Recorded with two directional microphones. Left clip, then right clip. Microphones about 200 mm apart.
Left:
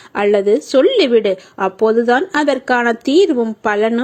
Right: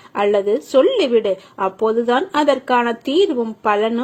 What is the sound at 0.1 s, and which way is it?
Speech, 30° left (ahead or behind).